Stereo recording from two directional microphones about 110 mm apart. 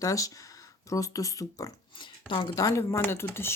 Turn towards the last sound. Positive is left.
turn(degrees=20)  # may be behind; listen again after turning